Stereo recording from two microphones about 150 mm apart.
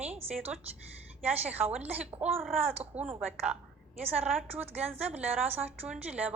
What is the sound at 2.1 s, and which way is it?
Speech, 40° right (ahead or behind).